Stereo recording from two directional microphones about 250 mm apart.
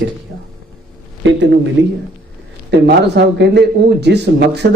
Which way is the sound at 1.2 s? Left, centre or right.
Right.